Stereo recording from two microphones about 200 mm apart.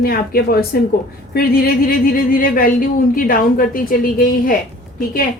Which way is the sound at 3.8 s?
45° left (ahead or behind).